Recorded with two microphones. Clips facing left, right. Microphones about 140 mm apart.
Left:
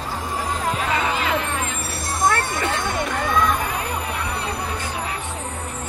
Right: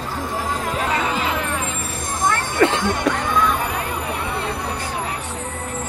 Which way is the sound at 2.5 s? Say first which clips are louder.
Right 6 dB; 85° right.